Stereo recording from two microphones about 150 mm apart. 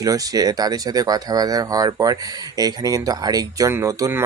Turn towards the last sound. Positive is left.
turn(degrees=-20)  # may be behind; listen again after turning